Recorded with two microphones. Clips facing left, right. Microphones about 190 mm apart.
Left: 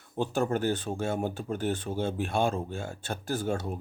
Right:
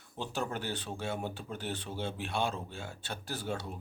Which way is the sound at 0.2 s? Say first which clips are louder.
Left 9 dB; 50° left (ahead or behind).